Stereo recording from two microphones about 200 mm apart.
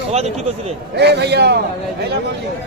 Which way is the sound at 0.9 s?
55° right (ahead or behind).